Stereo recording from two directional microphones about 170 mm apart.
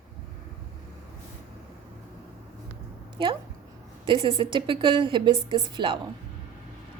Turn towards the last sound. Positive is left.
turn(degrees=-30)  # may be behind; listen again after turning